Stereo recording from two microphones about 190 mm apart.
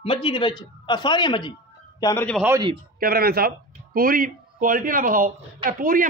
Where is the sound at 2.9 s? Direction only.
50° right (ahead or behind).